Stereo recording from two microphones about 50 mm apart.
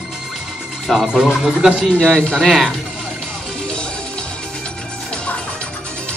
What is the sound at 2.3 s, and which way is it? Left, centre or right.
Speech, centre.